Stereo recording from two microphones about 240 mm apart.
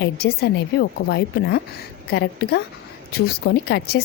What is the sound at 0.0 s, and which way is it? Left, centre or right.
Speech, left.